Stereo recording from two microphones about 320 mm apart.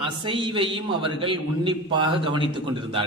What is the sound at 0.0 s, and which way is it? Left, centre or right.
A man's voice, centre.